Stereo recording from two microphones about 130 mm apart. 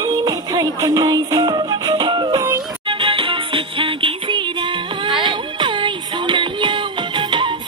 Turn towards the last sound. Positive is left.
turn(degrees=-40)  # may be behind; listen again after turning